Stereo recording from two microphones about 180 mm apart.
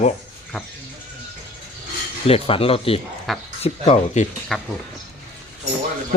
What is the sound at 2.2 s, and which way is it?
Speech, 30° left (ahead or behind).